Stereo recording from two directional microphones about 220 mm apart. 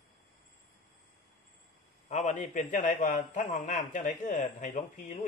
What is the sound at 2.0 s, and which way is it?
A man's voice, 35° left (ahead or behind).